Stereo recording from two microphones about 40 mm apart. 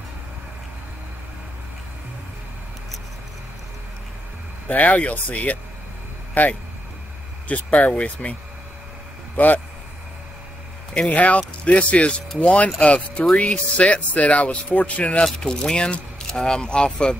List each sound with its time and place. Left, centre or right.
4.6 s speech: left
9.4 s speech: left
11.0 s speech: left
15.4 s speech: left